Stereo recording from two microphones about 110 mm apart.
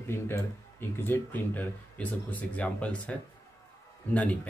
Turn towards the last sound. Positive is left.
turn(degrees=15)  # may be behind; listen again after turning